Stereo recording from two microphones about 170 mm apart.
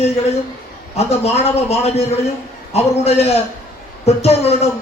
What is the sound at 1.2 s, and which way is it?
Speech, 35° left (ahead or behind).